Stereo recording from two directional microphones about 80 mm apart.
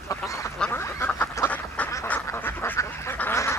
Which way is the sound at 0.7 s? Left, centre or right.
Left.